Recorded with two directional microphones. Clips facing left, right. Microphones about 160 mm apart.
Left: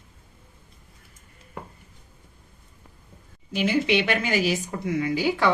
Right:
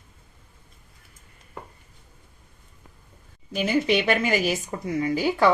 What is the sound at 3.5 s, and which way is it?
A woman's voice, 40° right (ahead or behind).